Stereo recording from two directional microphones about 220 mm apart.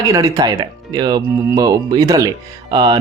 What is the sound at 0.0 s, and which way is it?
Speech, 15° right (ahead or behind).